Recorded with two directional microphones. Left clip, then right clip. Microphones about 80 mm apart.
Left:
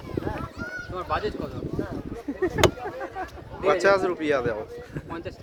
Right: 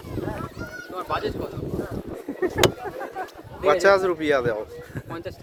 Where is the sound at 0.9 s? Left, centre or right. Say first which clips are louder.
Right 1 dB; right.